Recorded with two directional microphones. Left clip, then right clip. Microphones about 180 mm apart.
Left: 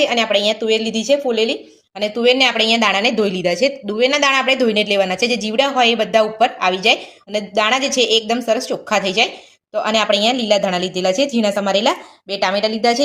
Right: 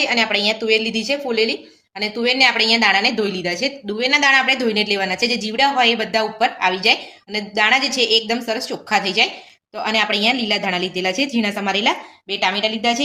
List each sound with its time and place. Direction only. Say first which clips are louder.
0.0 s a woman's voice: left 2 dB; 35° left (ahead or behind)